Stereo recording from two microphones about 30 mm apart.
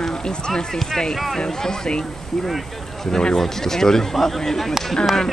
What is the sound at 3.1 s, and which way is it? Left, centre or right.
Speech, left.